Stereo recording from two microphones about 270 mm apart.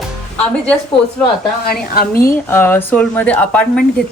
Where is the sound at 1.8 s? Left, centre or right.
Left.